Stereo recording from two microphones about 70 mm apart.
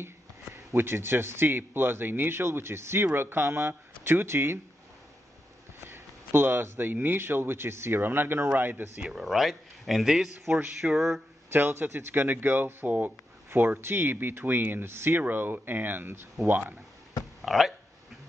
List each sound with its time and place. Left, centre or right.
0.7 s speech: right
5.9 s speech: right
9.2 s speech: centre
11.5 s speech: right
17.4 s speech: centre